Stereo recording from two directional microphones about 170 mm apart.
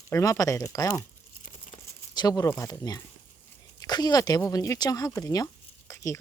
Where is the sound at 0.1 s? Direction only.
20° left (ahead or behind).